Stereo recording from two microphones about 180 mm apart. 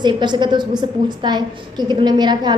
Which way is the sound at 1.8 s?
25° right (ahead or behind).